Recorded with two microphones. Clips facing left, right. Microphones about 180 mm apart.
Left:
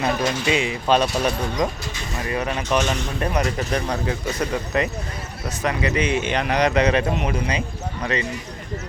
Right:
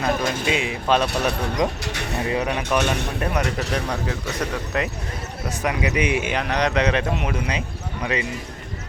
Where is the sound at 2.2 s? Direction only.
20° right (ahead or behind).